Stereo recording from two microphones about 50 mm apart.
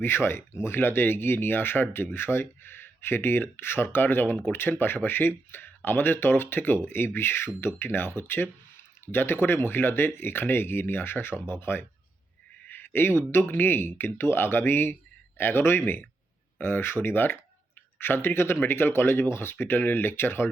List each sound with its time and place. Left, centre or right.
0.0 s speech: left
12.6 s a sound: left
13.4 s speech: left